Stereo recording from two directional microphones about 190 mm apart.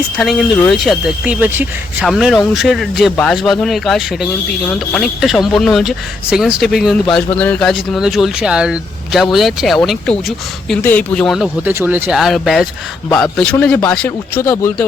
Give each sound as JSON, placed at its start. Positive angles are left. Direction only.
{"t": 0.2, "sound": "speech", "side_deg": 0}
{"t": 11.7, "sound": "speech", "side_deg": -10}
{"t": 14.4, "sound": "speech", "side_deg": 15}